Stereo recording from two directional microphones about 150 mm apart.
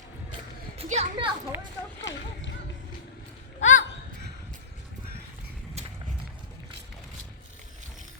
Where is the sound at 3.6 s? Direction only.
55° left (ahead or behind).